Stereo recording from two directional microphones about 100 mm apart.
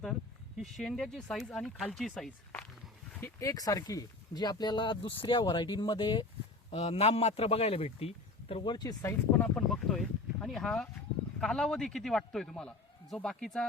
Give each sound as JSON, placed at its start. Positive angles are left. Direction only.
{"t": 0.0, "sound": "a man's voice", "side_deg": 5}
{"t": 3.2, "sound": "speech", "side_deg": 20}
{"t": 3.5, "sound": "speech", "side_deg": 40}
{"t": 6.7, "sound": "speech", "side_deg": 80}
{"t": 8.6, "sound": "speech", "side_deg": 45}
{"t": 9.4, "sound": "a man's voice", "side_deg": 5}